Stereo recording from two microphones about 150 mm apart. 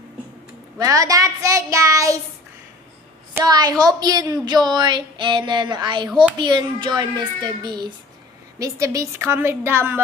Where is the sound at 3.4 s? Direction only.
25° right (ahead or behind).